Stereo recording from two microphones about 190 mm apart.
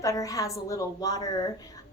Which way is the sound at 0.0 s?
15° left (ahead or behind).